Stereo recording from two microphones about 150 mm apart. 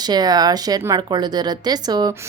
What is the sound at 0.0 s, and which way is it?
Speech, 25° right (ahead or behind).